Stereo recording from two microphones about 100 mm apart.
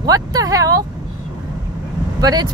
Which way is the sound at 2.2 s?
40° right (ahead or behind).